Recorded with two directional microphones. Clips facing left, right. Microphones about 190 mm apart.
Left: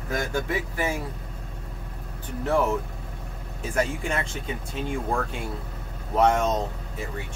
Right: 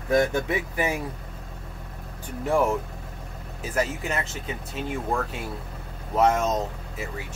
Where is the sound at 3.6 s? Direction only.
5° right (ahead or behind).